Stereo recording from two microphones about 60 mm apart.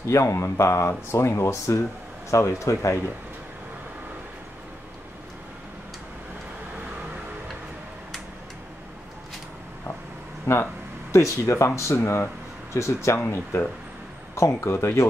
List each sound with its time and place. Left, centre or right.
0.1 s speech: left
10.4 s speech: left
12.7 s speech: left
13.2 s speech: left